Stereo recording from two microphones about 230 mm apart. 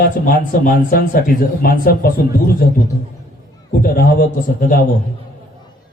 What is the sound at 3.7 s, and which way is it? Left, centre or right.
Speech, left.